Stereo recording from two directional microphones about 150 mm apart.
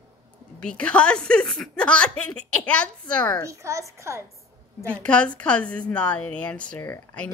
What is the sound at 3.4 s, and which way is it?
Speech, 20° right (ahead or behind).